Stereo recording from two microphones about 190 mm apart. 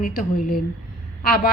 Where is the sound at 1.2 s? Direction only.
50° left (ahead or behind).